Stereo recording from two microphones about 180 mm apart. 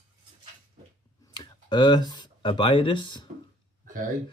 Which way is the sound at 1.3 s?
25° left (ahead or behind).